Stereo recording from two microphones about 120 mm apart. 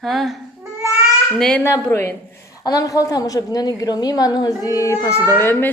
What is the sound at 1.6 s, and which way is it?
Speech, 20° left (ahead or behind).